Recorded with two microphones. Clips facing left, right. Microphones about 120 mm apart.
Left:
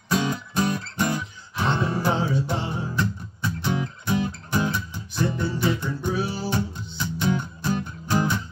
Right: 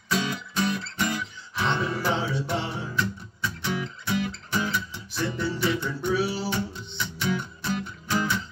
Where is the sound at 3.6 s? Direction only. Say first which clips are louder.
Left 3 dB; 30° left (ahead or behind).